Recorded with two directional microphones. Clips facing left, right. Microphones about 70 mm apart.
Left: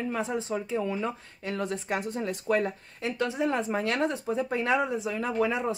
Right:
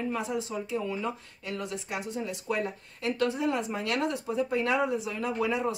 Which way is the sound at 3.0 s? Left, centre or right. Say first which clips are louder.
Even; left.